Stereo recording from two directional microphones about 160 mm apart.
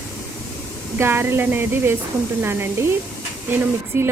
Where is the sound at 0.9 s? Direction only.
15° right (ahead or behind).